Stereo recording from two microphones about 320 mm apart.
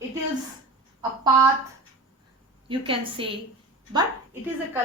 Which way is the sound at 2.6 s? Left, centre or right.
Centre.